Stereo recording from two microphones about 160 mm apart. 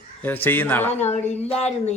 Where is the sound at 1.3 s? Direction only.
40° left (ahead or behind).